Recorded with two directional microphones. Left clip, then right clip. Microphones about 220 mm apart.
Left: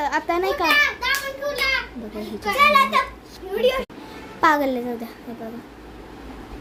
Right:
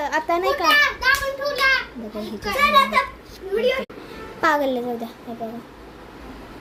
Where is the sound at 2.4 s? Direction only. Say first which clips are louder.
Left 1 dB; 15° left (ahead or behind).